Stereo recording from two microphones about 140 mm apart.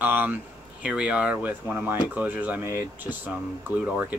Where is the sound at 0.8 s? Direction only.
10° right (ahead or behind).